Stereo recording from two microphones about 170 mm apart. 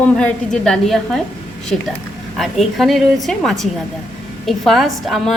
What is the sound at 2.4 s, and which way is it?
A woman's voice, centre (ahead or behind).